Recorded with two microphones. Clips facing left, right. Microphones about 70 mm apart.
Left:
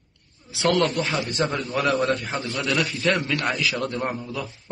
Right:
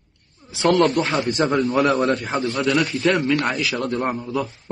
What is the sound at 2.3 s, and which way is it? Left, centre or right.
Speech, right.